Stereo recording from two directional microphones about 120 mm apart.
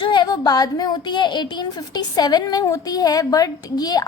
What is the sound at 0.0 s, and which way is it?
Speech, 40° left (ahead or behind).